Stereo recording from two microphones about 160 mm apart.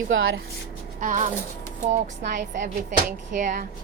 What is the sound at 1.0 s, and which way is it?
Speech, 55° right (ahead or behind).